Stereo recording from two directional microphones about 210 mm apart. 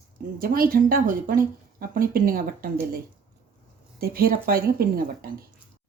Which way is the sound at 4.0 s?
45° right (ahead or behind).